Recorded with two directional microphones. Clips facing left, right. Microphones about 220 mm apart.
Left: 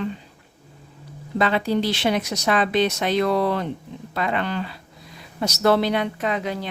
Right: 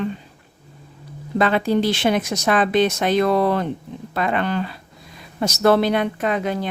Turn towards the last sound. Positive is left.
turn(degrees=-50)  # may be behind; listen again after turning